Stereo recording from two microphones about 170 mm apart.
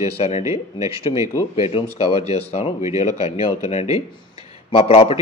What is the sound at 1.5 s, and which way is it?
Speech, 35° left (ahead or behind).